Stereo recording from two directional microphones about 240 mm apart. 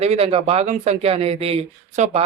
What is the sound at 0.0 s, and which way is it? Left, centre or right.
Speech, right.